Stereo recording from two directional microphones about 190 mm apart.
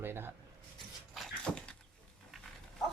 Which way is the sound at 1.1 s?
5° left (ahead or behind).